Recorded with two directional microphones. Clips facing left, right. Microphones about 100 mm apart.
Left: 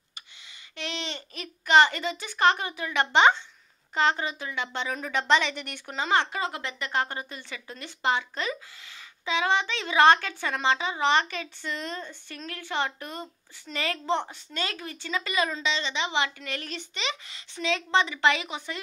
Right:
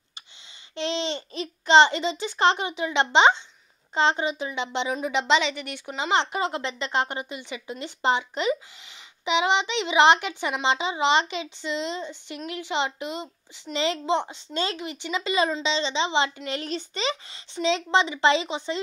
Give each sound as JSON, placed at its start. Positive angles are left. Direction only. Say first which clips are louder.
{"t": 0.7, "sound": "a child's voice", "louder": "right 8 dB", "side_deg": -30}